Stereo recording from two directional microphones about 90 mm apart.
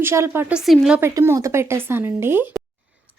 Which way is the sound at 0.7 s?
Centre (ahead or behind).